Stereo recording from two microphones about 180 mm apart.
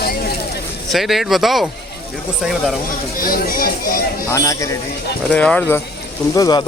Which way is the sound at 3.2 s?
55° left (ahead or behind).